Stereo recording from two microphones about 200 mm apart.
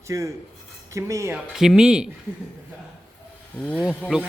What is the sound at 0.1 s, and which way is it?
Speech, 15° right (ahead or behind).